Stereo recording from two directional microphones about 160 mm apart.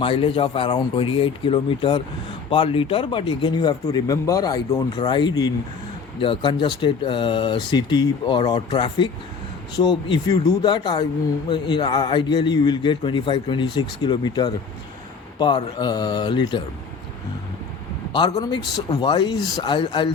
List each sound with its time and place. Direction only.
0.0 s a man's voice: 35° left (ahead or behind)
18.1 s a man's voice: 25° left (ahead or behind)